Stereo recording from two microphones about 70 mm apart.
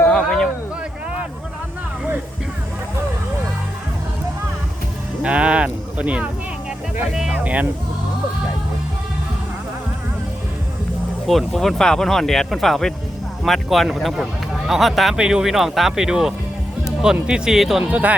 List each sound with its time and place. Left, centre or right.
0.1 s a sound: centre
5.2 s a sound: centre
7.1 s music: centre
7.4 s speech: centre
11.3 s speech: centre
17.9 s speech: right